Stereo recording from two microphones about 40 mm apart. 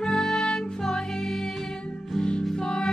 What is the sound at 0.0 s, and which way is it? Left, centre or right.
Music, centre.